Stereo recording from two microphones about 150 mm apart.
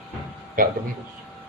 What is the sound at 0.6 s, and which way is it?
Speech, 65° right (ahead or behind).